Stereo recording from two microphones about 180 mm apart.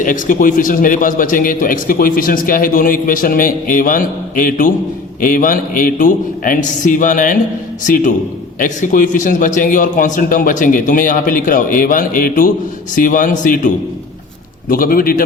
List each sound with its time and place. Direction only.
0.0 s a man's voice: 45° left (ahead or behind)